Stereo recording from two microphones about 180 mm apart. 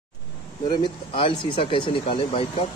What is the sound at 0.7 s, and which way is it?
Speech, 25° left (ahead or behind).